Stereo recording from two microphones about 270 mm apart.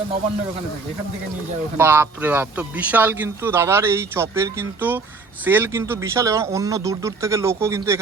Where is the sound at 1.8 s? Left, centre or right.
Centre.